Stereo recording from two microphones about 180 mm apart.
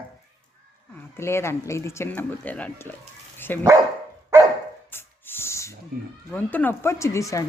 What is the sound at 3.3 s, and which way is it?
Dog, 10° left (ahead or behind).